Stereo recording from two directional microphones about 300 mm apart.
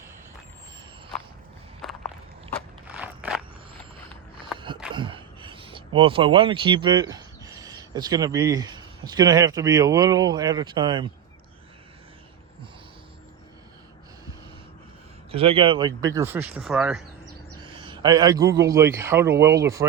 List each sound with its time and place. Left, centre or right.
1.8 s walk: centre
2.9 s a sound: centre
4.5 s a sound: centre
4.9 s speech: centre
15.3 s speech: centre
17.6 s a man's voice: centre